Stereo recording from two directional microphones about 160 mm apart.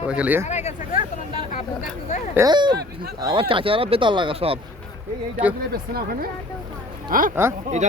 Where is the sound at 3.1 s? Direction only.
25° right (ahead or behind).